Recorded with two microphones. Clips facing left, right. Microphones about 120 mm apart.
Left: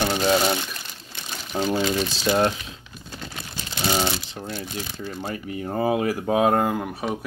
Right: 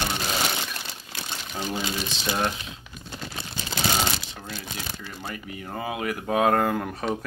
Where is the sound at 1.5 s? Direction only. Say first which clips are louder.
Left 8 dB; 30° left (ahead or behind).